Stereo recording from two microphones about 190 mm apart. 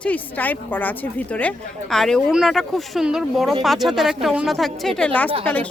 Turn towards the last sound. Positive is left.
turn(degrees=10)  # may be behind; listen again after turning